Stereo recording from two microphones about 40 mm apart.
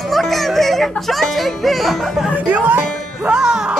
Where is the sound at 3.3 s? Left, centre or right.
Centre.